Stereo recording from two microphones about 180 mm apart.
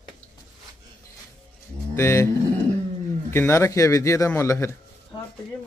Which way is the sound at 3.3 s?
15° left (ahead or behind).